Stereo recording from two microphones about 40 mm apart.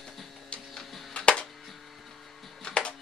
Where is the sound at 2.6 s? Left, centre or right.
Left.